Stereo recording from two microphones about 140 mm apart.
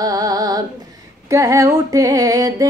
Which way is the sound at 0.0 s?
25° right (ahead or behind).